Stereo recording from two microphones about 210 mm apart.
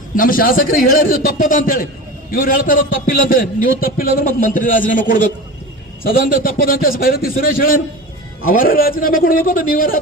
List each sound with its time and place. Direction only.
0.2 s a man's voice: 45° left (ahead or behind)